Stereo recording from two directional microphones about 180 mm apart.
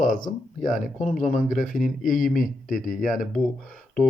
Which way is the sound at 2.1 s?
50° left (ahead or behind).